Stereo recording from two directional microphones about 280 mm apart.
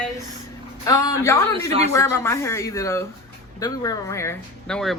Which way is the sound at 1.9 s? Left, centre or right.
Centre.